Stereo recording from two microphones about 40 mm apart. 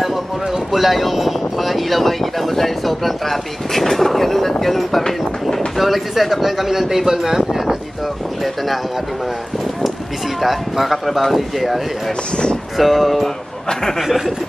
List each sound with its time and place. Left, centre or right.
0.0 s speech: centre
10.4 s speech: centre